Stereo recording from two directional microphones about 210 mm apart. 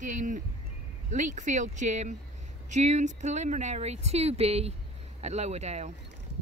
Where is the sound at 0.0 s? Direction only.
35° right (ahead or behind).